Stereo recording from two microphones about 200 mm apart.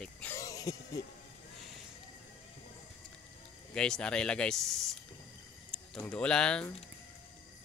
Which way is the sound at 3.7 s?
5° left (ahead or behind).